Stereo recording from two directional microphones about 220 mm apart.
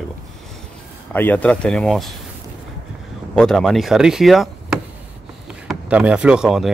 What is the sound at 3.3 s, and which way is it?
Speech, 5° left (ahead or behind).